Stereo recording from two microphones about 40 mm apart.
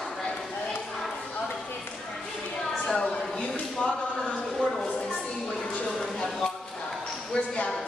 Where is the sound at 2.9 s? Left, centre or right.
Centre.